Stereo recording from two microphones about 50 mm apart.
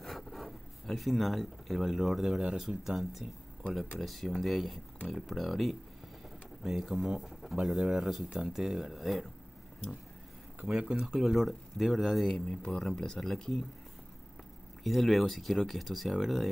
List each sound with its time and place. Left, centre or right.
0.0 s speech: centre
10.7 s speech: centre
11.0 s speech: centre
12.3 s speech: centre
14.8 s speech: centre